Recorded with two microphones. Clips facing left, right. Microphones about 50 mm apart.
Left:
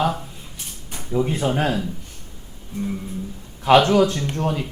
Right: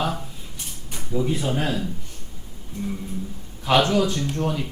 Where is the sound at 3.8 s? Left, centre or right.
Left.